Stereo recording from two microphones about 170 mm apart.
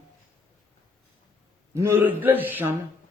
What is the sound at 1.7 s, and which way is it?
A man's voice, 15° right (ahead or behind).